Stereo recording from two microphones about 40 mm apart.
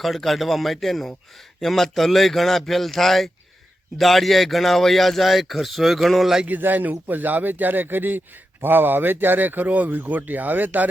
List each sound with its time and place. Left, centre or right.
0.0 s speech: centre
6.6 s speech: right